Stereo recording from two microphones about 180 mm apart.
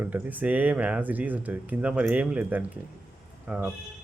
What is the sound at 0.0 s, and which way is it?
Speech, 10° right (ahead or behind).